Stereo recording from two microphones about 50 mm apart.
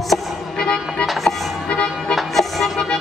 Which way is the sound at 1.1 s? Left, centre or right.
Centre.